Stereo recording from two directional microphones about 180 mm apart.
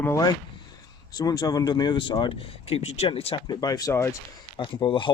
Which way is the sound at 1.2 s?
20° left (ahead or behind).